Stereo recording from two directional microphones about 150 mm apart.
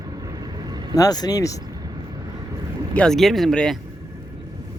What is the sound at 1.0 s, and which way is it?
Speech, 25° left (ahead or behind).